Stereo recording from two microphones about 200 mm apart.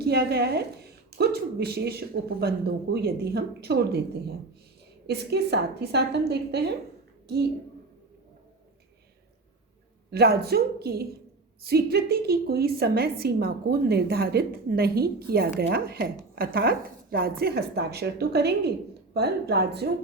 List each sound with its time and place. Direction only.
0.0 s a woman's voice: 55° right (ahead or behind)
5.0 s a woman's voice: 55° right (ahead or behind)
10.1 s a woman's voice: 50° right (ahead or behind)